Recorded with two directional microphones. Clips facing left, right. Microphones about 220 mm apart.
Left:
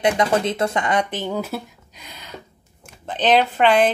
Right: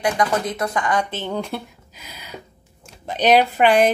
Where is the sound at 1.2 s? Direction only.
5° left (ahead or behind).